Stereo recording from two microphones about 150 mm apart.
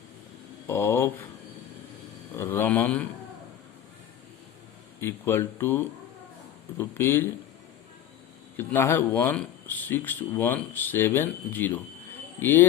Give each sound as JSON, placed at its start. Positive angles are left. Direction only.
{"t": 0.7, "sound": "speech", "side_deg": 15}
{"t": 2.3, "sound": "speech", "side_deg": 15}
{"t": 4.9, "sound": "speech", "side_deg": 15}
{"t": 8.5, "sound": "speech", "side_deg": 15}